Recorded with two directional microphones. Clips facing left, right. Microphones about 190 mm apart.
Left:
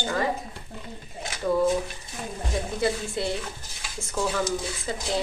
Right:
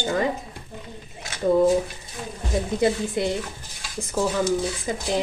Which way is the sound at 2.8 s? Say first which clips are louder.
Right 5 dB; 20° right (ahead or behind).